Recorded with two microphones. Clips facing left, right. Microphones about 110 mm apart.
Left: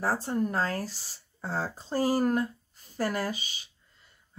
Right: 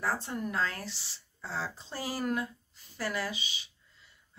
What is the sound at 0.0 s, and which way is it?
Speech, 40° left (ahead or behind).